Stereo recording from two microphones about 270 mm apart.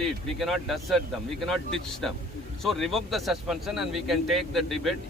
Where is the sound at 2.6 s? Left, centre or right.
Centre.